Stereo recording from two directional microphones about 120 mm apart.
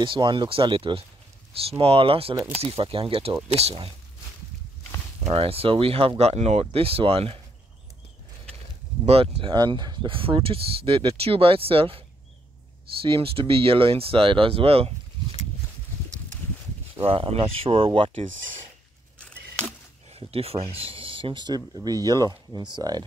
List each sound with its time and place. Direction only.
0.0 s speech: 40° right (ahead or behind); by 3.9 s 60° right (ahead or behind)
5.3 s speech: 50° right (ahead or behind)
9.0 s speech: 55° right (ahead or behind)
13.0 s speech: 50° right (ahead or behind)
16.9 s speech: 50° right (ahead or behind)
19.2 s a sound: 10° left (ahead or behind)
20.1 s speech: 55° right (ahead or behind); by 23.0 s 35° right (ahead or behind)